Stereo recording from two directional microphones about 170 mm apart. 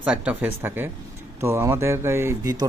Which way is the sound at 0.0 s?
5° right (ahead or behind).